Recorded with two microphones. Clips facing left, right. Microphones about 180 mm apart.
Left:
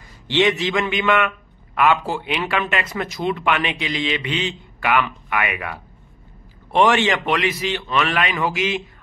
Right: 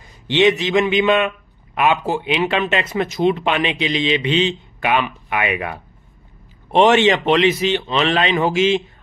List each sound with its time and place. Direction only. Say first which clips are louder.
0.3 s speech: right 4 dB; 20° right (ahead or behind)